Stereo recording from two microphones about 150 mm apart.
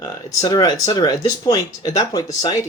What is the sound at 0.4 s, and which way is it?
Speech, 25° left (ahead or behind).